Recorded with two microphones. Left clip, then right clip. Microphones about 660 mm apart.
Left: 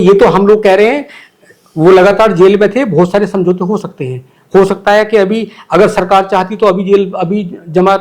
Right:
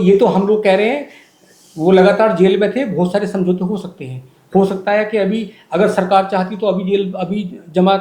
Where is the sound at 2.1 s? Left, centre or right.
Left.